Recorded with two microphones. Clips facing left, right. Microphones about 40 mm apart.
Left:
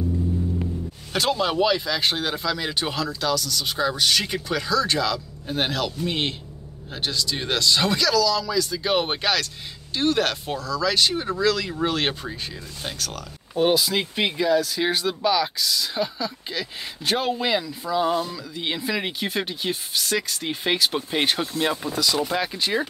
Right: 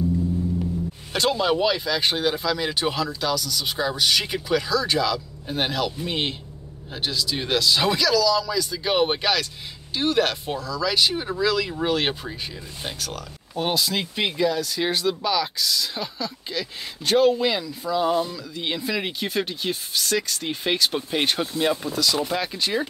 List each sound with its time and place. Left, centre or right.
1.1 s speech: centre